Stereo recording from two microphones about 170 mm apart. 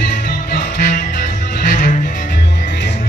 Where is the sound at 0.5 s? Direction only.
60° left (ahead or behind).